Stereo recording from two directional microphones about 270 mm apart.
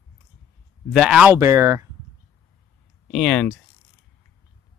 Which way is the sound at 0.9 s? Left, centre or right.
Centre.